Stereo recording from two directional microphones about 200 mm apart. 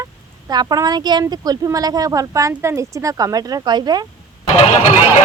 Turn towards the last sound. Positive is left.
turn(degrees=35)  # may be behind; listen again after turning